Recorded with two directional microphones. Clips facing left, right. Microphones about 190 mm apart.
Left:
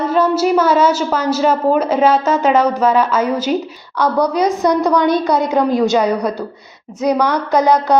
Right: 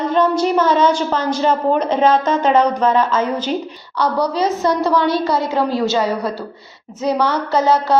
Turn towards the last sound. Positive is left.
turn(degrees=15)  # may be behind; listen again after turning